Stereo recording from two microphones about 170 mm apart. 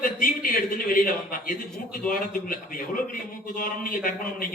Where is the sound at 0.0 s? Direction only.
55° left (ahead or behind).